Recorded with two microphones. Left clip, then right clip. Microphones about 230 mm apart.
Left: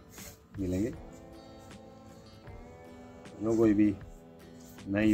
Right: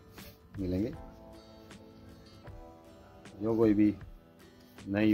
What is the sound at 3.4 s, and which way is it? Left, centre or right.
Speech, right.